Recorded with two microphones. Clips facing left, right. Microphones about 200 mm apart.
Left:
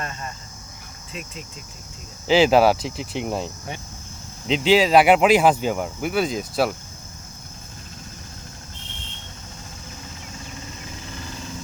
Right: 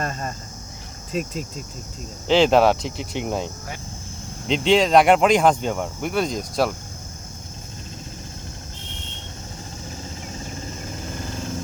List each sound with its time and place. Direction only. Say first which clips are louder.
0.0 s a sound: right 5 dB; 40° right (ahead or behind)
1.1 s speech: right 10 dB; 40° right (ahead or behind)
2.2 s speech: even; 5° left (ahead or behind)